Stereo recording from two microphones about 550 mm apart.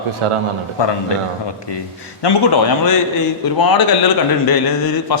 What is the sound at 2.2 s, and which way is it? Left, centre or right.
A man's voice, left.